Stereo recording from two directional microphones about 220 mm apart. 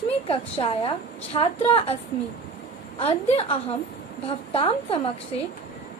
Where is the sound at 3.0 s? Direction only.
25° left (ahead or behind).